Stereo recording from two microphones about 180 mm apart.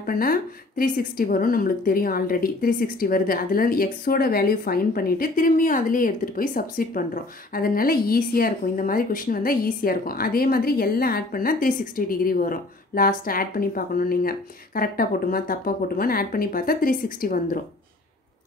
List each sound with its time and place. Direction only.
0.0 s a woman's voice: 50° left (ahead or behind)